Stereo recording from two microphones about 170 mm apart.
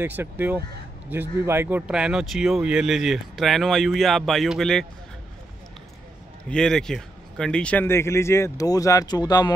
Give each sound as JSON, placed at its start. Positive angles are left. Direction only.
{"t": 0.0, "sound": "speech", "side_deg": -10}
{"t": 6.5, "sound": "speech", "side_deg": 5}